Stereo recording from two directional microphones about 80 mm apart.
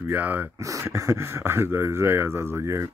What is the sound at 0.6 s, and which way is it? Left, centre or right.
Speech, right.